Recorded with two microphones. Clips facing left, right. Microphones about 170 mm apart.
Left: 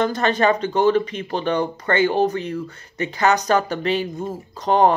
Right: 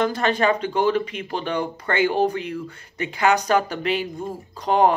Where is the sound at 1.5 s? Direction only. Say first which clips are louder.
Left 5 dB; 35° left (ahead or behind).